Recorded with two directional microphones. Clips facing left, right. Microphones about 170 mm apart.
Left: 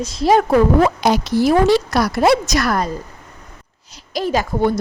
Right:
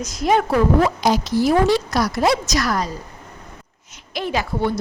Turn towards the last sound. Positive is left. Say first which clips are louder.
# left 4 dB
turn(degrees=45)  # may be behind; listen again after turning